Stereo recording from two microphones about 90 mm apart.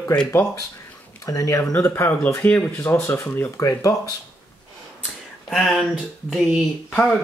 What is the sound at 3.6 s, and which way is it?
Speech, 35° left (ahead or behind).